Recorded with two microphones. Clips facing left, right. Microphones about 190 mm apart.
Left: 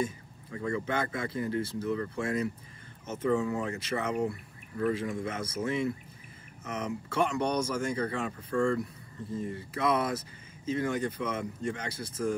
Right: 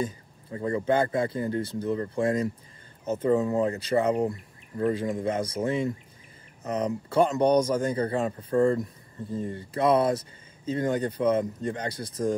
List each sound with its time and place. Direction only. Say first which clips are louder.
0.0 s speech: right 2 dB; 35° right (ahead or behind)